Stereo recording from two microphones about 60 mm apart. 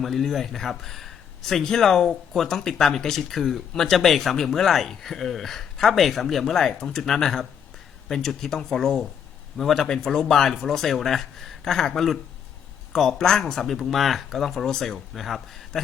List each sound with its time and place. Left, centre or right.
0.0 s speech: centre